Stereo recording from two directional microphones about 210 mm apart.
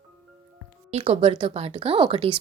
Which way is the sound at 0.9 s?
25° right (ahead or behind).